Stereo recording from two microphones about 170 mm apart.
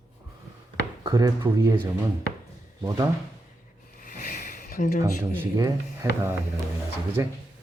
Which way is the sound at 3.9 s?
50° left (ahead or behind).